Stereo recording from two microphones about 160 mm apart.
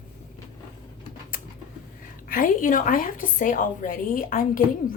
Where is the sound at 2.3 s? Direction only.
60° left (ahead or behind).